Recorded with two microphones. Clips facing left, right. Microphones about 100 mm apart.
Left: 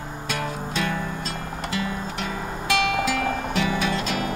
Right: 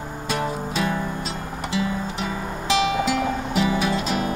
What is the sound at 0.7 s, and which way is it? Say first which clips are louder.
Music: right 2 dB; 5° right (ahead or behind).